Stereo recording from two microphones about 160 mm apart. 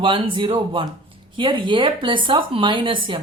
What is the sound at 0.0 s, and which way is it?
A woman's voice, 30° right (ahead or behind).